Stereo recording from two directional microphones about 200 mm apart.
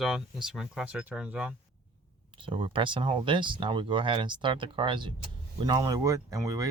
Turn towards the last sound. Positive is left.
turn(degrees=-15)  # may be behind; listen again after turning